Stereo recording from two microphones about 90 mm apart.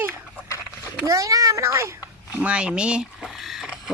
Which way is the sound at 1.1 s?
40° right (ahead or behind).